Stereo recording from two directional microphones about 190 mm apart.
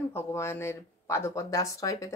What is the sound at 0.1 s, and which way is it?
Speech, 15° left (ahead or behind).